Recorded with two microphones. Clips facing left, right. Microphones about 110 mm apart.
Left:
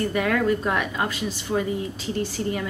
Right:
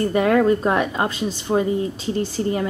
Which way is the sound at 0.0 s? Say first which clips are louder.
Right 6 dB; 30° right (ahead or behind).